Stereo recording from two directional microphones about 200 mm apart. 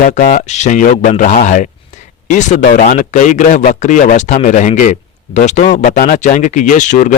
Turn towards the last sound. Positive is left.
turn(degrees=40)  # may be behind; listen again after turning